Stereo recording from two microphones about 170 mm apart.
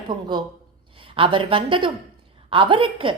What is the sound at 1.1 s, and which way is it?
A woman's voice, 30° right (ahead or behind).